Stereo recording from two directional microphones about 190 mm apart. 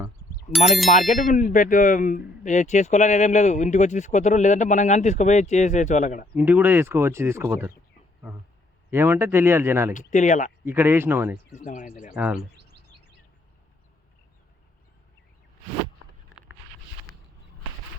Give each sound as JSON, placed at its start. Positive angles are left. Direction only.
{"t": 0.5, "sound": "speech", "side_deg": 0}
{"t": 0.9, "sound": "speech", "side_deg": 40}
{"t": 6.3, "sound": "speech", "side_deg": -10}
{"t": 8.9, "sound": "speech", "side_deg": -10}
{"t": 9.9, "sound": "speech", "side_deg": 40}
{"t": 10.7, "sound": "speech", "side_deg": -10}
{"t": 11.5, "sound": "speech", "side_deg": 40}
{"t": 12.1, "sound": "speech", "side_deg": -5}
{"t": 12.5, "sound": "bird", "side_deg": -60}